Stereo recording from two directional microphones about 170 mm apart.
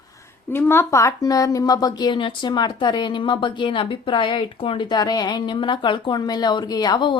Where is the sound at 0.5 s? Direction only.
15° left (ahead or behind).